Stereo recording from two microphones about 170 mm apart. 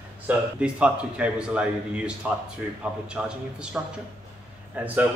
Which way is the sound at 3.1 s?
5° right (ahead or behind).